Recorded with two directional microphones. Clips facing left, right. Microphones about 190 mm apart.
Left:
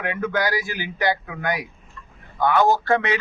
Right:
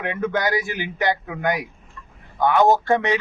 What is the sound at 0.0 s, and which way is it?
Speech, 20° right (ahead or behind).